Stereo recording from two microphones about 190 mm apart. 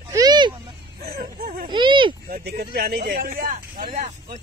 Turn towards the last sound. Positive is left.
turn(degrees=-35)  # may be behind; listen again after turning